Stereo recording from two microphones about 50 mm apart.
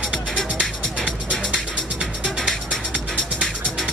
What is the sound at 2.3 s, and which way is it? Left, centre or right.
Music, centre.